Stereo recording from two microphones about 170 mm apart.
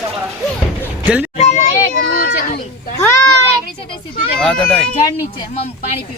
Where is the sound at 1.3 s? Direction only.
40° left (ahead or behind).